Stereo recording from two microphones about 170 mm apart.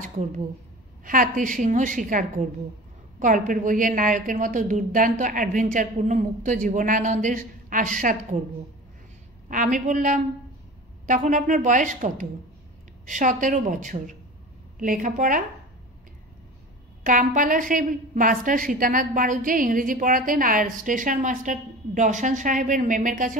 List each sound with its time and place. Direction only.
0.0 s a woman's voice: 45° right (ahead or behind)
9.5 s a woman's voice: 50° right (ahead or behind)
17.0 s a woman's voice: 50° right (ahead or behind)